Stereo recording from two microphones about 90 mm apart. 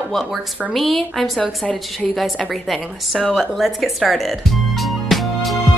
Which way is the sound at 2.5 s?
Centre (ahead or behind).